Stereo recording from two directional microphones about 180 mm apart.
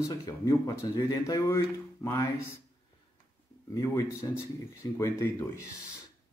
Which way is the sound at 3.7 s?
20° left (ahead or behind).